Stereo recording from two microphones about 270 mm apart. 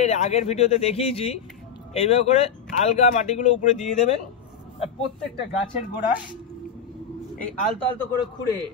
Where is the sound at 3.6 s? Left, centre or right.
Left.